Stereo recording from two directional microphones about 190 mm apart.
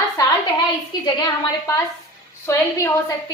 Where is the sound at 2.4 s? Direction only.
15° left (ahead or behind).